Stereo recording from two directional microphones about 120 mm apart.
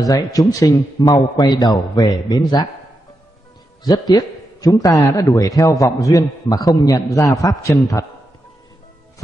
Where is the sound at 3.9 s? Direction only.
35° left (ahead or behind).